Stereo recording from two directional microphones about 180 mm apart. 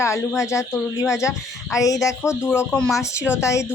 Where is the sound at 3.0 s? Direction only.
15° left (ahead or behind).